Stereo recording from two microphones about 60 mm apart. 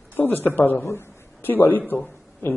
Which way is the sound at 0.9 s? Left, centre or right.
Left.